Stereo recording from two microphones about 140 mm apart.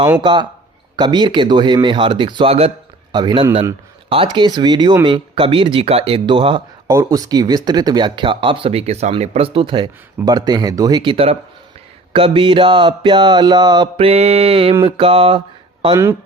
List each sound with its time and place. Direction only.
0.2 s speech: 35° right (ahead or behind)
3.1 s speech: 30° right (ahead or behind)
6.8 s speech: 25° right (ahead or behind)
13.9 s speech: 45° right (ahead or behind)